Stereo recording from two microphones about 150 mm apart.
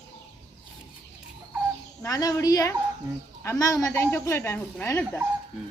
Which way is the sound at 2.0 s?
20° left (ahead or behind).